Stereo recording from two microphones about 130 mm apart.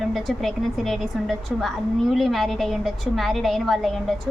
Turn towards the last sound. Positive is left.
turn(degrees=0)  # may be behind; listen again after turning